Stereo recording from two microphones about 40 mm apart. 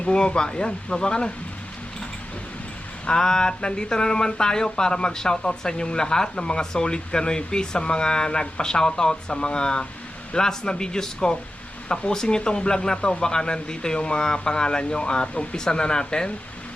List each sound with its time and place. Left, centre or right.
0.1 s speech: left
3.1 s speech: centre